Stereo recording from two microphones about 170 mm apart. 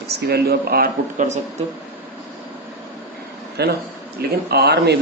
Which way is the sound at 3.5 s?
70° right (ahead or behind).